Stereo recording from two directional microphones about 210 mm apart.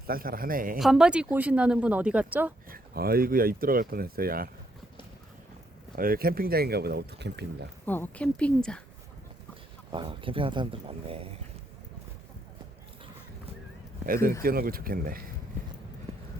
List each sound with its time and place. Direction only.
0.1 s speech: 45° right (ahead or behind)
0.8 s speech: centre (ahead or behind)
2.6 s speech: 45° right (ahead or behind)
6.0 s speech: 45° right (ahead or behind)
7.9 s a woman's voice: 10° left (ahead or behind)
9.9 s speech: 25° right (ahead or behind)
14.4 s speech: 45° right (ahead or behind)